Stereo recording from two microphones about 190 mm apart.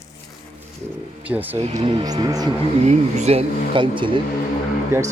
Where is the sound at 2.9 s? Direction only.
35° right (ahead or behind).